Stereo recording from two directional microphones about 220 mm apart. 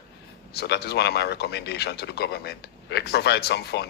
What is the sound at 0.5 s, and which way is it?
Speech, 45° left (ahead or behind).